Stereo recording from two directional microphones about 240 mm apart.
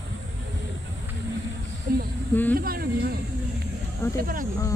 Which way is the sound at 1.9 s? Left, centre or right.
Right.